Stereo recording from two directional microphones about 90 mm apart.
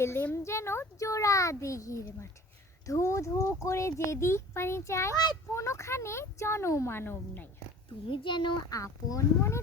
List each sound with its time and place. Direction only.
0.0 s speech: 25° left (ahead or behind)
8.1 s a child's voice: 65° left (ahead or behind)
8.7 s speech: 40° left (ahead or behind)